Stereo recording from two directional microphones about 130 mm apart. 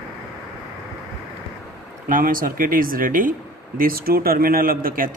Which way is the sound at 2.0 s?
90° right.